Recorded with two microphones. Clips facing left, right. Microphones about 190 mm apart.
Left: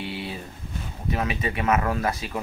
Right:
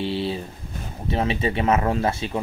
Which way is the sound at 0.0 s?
30° right (ahead or behind).